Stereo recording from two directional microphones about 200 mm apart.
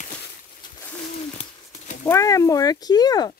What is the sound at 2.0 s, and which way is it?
Speech, 15° left (ahead or behind).